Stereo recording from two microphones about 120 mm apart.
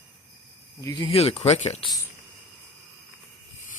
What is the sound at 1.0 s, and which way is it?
Speech, 55° left (ahead or behind).